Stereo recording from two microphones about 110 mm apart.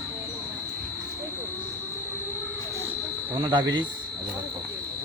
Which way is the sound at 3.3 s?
50° right (ahead or behind).